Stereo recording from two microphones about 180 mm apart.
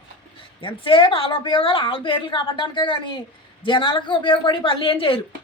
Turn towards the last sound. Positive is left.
turn(degrees=30)  # may be behind; listen again after turning